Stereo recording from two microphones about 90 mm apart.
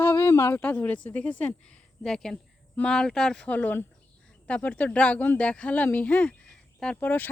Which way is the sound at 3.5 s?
20° left (ahead or behind).